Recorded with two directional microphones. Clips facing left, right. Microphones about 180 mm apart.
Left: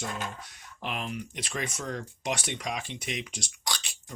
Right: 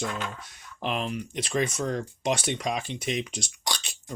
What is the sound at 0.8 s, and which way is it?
Speech, 30° right (ahead or behind).